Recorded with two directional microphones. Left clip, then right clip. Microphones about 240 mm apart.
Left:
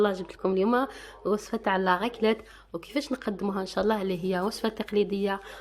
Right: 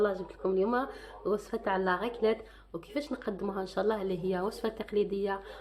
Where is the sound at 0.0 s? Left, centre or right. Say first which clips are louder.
Left 4 dB; left.